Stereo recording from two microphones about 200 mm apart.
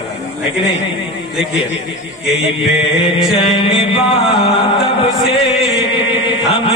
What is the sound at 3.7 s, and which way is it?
Chant, 25° left (ahead or behind).